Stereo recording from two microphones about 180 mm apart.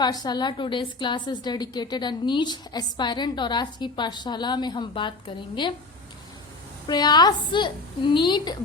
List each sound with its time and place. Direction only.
0.0 s a woman's voice: 25° left (ahead or behind)
6.8 s a woman's voice: 25° left (ahead or behind)